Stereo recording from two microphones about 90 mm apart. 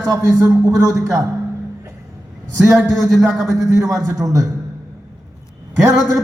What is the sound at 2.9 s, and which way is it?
A man's voice, 40° right (ahead or behind).